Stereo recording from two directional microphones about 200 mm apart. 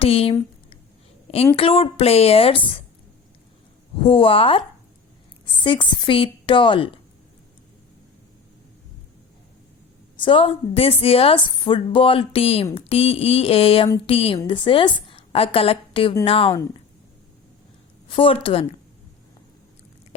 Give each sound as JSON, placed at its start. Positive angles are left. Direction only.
{"t": 0.0, "sound": "a sound", "side_deg": 30}
{"t": 1.5, "sound": "a woman's voice", "side_deg": 25}
{"t": 4.0, "sound": "a woman's voice", "side_deg": 25}
{"t": 10.2, "sound": "a woman's voice", "side_deg": 25}
{"t": 18.2, "sound": "a woman's voice", "side_deg": 25}